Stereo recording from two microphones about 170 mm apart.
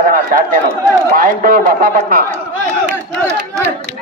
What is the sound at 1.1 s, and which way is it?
A man's voice, 55° right (ahead or behind).